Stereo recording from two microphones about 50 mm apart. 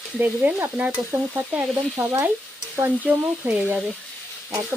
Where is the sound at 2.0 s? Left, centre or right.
Right.